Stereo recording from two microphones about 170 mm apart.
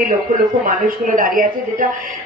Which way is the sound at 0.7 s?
55° right (ahead or behind).